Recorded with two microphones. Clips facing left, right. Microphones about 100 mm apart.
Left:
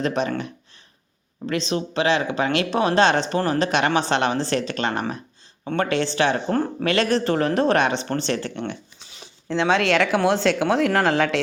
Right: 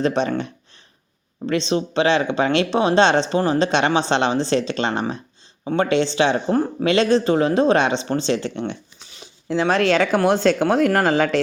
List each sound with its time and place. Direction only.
0.0 s speech: 30° right (ahead or behind)
9.5 s speech: 10° right (ahead or behind)